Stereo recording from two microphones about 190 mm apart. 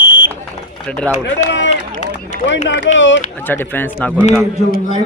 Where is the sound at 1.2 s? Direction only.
75° left (ahead or behind).